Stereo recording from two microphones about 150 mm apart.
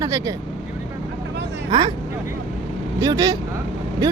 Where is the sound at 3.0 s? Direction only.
25° right (ahead or behind).